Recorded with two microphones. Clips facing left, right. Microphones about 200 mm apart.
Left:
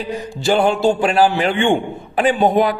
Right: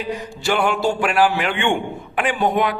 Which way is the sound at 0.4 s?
30° left (ahead or behind).